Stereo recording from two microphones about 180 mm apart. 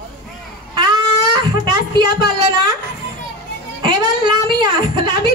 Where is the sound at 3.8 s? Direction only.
25° right (ahead or behind).